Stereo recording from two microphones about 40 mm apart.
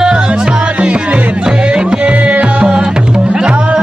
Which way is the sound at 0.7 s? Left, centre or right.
Right.